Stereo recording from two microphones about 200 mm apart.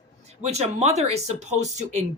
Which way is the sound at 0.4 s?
30° right (ahead or behind).